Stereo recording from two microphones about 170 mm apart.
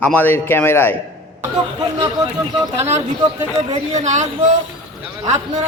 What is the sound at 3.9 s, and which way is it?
Speech, 45° right (ahead or behind).